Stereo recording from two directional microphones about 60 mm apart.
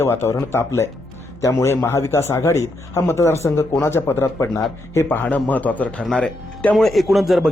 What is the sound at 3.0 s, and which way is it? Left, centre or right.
Speech, left.